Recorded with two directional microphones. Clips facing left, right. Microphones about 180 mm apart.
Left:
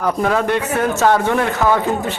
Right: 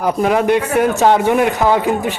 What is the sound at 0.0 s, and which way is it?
Speech, 15° right (ahead or behind).